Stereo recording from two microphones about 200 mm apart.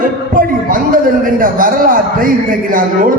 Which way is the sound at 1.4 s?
45° right (ahead or behind).